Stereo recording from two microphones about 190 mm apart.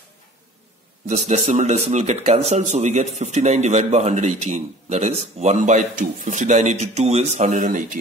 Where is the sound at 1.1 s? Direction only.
35° right (ahead or behind).